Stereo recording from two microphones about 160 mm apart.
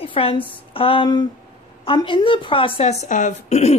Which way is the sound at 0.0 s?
35° left (ahead or behind).